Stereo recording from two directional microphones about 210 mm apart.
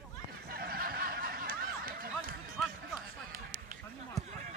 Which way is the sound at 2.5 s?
Centre (ahead or behind).